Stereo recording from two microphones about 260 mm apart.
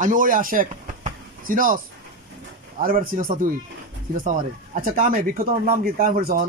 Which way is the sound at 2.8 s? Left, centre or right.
Right.